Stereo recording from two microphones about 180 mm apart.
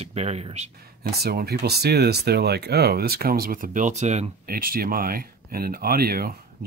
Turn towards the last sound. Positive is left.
turn(degrees=-55)  # may be behind; listen again after turning